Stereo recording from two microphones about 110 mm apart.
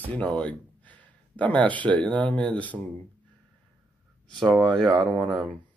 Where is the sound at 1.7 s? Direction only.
15° left (ahead or behind).